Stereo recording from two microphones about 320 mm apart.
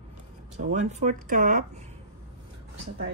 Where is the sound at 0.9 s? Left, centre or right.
Right.